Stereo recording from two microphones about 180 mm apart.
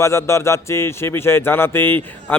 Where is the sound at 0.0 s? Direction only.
15° left (ahead or behind).